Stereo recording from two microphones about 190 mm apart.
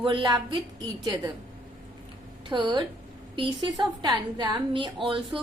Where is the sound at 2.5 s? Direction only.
25° right (ahead or behind).